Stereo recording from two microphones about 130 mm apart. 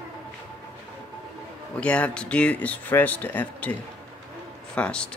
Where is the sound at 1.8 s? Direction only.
10° left (ahead or behind).